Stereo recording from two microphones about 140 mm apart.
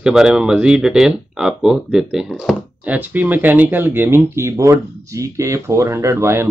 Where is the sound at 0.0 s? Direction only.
5° right (ahead or behind).